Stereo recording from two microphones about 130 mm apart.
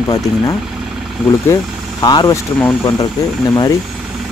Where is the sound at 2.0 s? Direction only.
30° left (ahead or behind).